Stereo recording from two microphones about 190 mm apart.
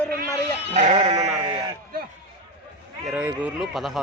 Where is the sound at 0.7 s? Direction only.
35° right (ahead or behind).